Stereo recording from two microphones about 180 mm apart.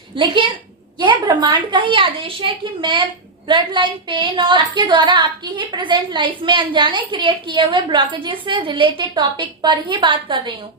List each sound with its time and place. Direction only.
0.1 s a woman's voice: 30° right (ahead or behind)